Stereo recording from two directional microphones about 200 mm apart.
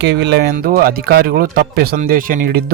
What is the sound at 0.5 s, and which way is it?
Speech, 50° right (ahead or behind).